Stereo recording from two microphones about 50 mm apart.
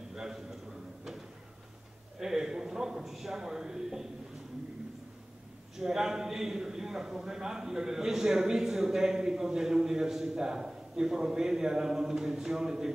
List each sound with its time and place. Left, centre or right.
0.1 s a sound: centre
2.1 s a man's voice: centre
5.8 s a man's voice: centre